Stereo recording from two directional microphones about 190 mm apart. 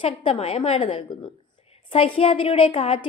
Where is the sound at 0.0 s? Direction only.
30° left (ahead or behind).